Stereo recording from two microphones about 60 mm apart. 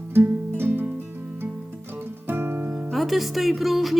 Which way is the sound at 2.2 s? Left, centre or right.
Right.